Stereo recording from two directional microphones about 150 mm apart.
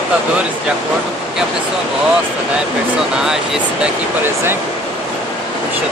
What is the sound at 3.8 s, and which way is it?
Speech, 15° right (ahead or behind).